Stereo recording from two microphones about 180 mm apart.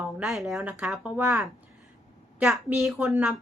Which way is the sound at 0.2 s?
Centre (ahead or behind).